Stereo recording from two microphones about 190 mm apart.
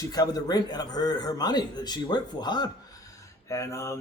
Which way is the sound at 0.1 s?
20° left (ahead or behind).